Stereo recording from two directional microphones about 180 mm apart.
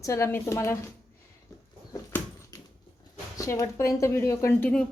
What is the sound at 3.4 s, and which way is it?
A woman's voice, 20° left (ahead or behind).